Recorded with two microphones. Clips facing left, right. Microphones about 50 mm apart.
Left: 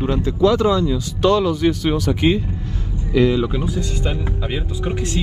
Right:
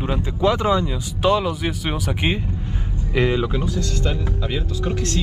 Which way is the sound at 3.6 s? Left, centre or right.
Centre.